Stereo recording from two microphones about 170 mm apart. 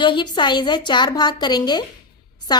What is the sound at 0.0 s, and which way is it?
A woman's voice, 25° left (ahead or behind).